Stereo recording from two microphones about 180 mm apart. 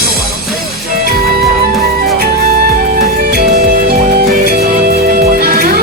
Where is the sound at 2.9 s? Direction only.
55° right (ahead or behind).